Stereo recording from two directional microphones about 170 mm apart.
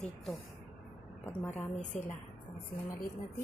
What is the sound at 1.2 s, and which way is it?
Speech, 10° left (ahead or behind).